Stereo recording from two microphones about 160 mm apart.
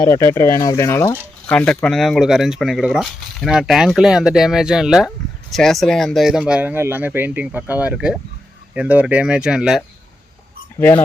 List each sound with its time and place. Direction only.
0.0 s speech: 20° left (ahead or behind)
1.5 s speech: 5° left (ahead or behind)